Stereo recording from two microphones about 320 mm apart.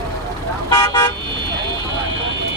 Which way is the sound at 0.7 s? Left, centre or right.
Centre.